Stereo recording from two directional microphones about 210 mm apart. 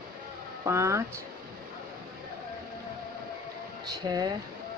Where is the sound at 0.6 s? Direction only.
15° right (ahead or behind).